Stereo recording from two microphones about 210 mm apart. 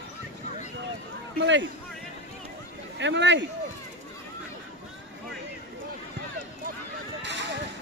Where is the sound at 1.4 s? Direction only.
60° right (ahead or behind).